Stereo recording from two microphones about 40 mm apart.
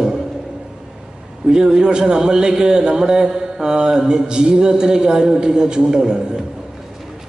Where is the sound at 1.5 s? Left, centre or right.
Centre.